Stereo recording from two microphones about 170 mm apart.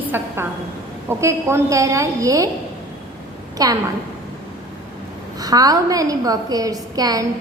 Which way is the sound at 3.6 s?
20° right (ahead or behind).